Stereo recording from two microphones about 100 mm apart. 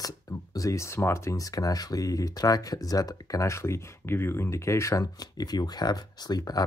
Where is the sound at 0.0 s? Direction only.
35° left (ahead or behind).